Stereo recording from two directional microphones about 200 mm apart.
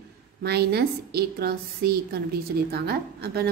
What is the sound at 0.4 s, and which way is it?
A woman's voice, 55° right (ahead or behind).